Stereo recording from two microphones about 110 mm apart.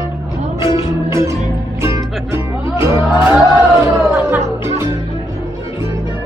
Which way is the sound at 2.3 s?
25° right (ahead or behind).